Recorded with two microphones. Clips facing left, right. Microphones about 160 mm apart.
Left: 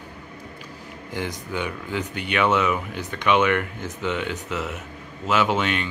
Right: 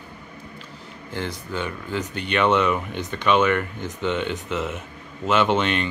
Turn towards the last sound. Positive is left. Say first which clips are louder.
# right 2 dB
turn(degrees=5)  # may be behind; listen again after turning